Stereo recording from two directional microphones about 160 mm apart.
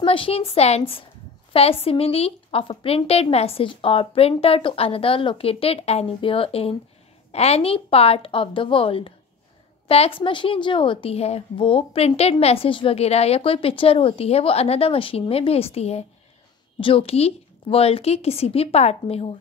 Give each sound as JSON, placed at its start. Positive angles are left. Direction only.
{"t": 0.0, "sound": "a woman's voice", "side_deg": 35}